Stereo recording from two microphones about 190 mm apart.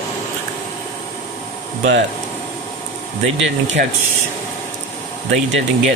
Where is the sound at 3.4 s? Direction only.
75° right (ahead or behind).